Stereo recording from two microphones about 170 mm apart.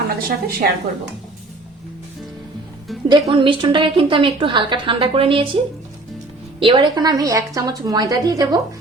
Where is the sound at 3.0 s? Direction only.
30° right (ahead or behind).